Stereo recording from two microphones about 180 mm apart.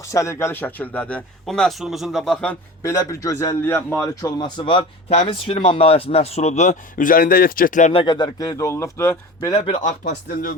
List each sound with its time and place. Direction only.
0.0 s speech: 15° left (ahead or behind)
2.8 s a man's voice: 20° left (ahead or behind); by 7.9 s 45° left (ahead or behind)
7.9 s a man's voice: 25° left (ahead or behind)
9.6 s speech: 35° left (ahead or behind)
10.0 s speech: 50° left (ahead or behind)